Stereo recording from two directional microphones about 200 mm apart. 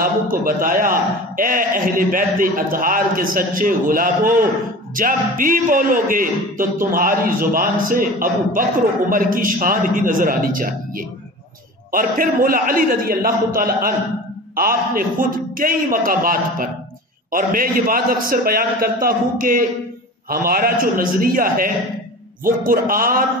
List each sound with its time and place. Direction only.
0.0 s a man's voice: 45° right (ahead or behind)